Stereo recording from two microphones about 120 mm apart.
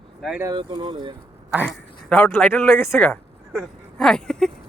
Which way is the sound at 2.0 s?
10° left (ahead or behind).